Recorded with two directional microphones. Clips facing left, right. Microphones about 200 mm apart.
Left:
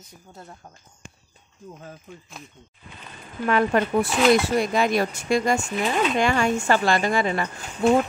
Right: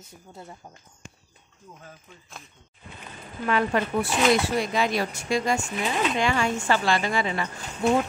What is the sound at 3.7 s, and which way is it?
Speech, 50° left (ahead or behind).